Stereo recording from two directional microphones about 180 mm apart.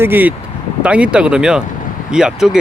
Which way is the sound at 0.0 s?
10° right (ahead or behind).